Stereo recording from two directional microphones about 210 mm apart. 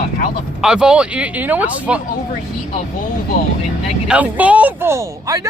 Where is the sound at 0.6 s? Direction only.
5° right (ahead or behind).